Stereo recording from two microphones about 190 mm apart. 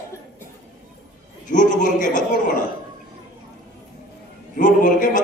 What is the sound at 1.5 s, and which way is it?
Speech, 40° left (ahead or behind).